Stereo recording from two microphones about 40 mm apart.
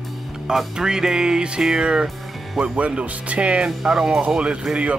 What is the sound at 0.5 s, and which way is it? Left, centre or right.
Speech, centre.